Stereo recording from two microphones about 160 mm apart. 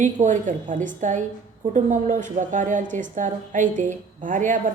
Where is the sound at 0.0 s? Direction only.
50° right (ahead or behind).